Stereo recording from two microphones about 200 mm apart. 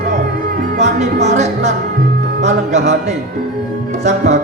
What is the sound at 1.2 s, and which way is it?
Music, 35° right (ahead or behind).